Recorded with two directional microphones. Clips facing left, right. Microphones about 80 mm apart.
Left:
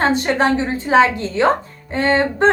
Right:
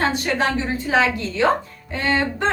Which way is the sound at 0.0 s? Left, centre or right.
Left.